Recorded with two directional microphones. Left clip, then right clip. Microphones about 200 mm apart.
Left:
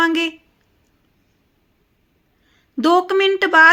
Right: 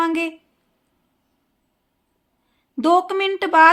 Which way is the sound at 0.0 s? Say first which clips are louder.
Left 4 dB; 5° left (ahead or behind).